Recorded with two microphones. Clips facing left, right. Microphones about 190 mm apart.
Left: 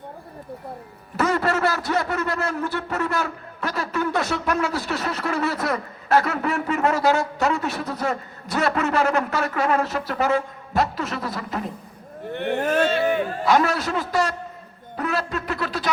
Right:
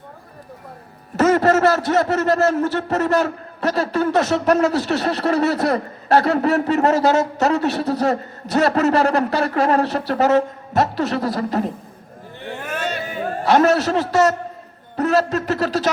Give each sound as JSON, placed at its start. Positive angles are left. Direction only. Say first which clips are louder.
{"t": 1.1, "sound": "a man's voice", "louder": "right 7 dB", "side_deg": -40}
{"t": 12.3, "sound": "speech", "louder": "left 8 dB", "side_deg": 65}
{"t": 12.6, "sound": "a sound", "louder": "left 6 dB", "side_deg": 40}
{"t": 13.1, "sound": "a man's voice", "louder": "right 3 dB", "side_deg": -40}